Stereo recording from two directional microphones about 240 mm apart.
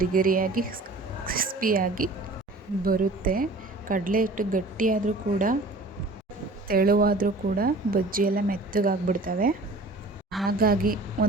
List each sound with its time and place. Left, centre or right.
0.0 s a woman's voice: right
6.7 s speech: right
10.6 s speech: right